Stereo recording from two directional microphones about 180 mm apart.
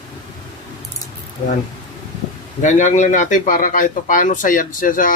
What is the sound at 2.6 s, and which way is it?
A man's voice, 45° left (ahead or behind).